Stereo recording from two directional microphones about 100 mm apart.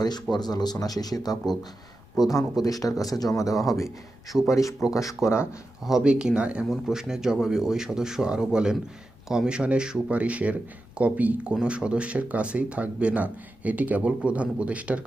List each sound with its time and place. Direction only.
0.0 s speech: 45° left (ahead or behind); by 5.5 s 30° left (ahead or behind)
5.8 s speech: 5° right (ahead or behind)